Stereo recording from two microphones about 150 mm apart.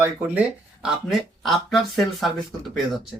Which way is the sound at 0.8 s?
Centre (ahead or behind).